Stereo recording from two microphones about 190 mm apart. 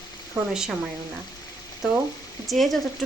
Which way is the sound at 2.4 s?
Centre (ahead or behind).